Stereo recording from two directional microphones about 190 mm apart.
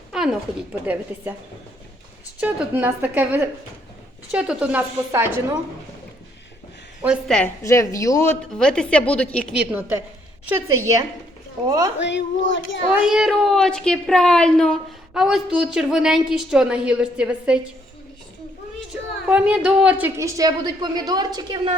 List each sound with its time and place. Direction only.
0.1 s a woman's voice: 5° right (ahead or behind)
2.4 s a woman's voice: 10° right (ahead or behind)
7.0 s speech: centre (ahead or behind)
7.6 s a woman's voice: 15° left (ahead or behind)
8.5 s a woman's voice: 5° left (ahead or behind)
9.6 s a woman's voice: 10° right (ahead or behind)
11.9 s a child's voice: 70° left (ahead or behind)
13.0 s speech: 5° right (ahead or behind)
19.3 s a woman's voice: 5° right (ahead or behind); by 21.8 s 25° right (ahead or behind)